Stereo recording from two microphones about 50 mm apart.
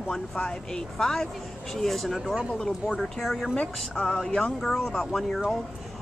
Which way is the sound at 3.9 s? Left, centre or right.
Centre.